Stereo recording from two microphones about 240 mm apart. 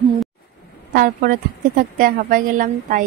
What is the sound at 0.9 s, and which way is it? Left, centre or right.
A woman's voice, right.